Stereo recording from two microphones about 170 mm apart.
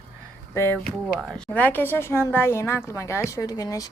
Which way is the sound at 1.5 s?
10° left (ahead or behind).